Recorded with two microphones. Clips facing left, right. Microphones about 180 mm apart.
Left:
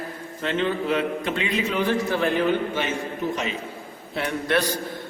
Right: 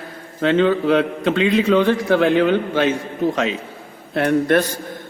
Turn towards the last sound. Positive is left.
turn(degrees=-50)  # may be behind; listen again after turning